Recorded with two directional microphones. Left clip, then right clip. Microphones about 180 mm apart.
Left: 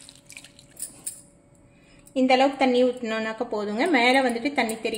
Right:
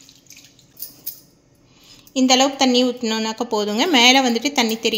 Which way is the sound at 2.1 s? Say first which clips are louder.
Right 4 dB; 50° right (ahead or behind).